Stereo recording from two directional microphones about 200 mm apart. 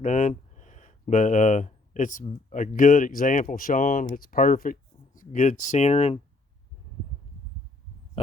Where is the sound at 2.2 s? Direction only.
40° left (ahead or behind).